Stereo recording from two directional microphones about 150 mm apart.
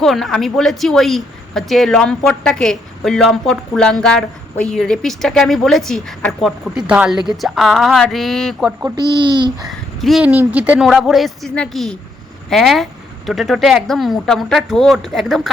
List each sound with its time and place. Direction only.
0.0 s a woman's voice: centre (ahead or behind)
8.8 s a child's voice: 30° right (ahead or behind)
9.6 s a sound: centre (ahead or behind)
10.5 s a woman's voice: 10° right (ahead or behind)